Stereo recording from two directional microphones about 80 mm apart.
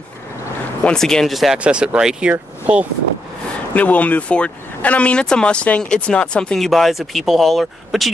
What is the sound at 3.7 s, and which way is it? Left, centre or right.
Speech, centre.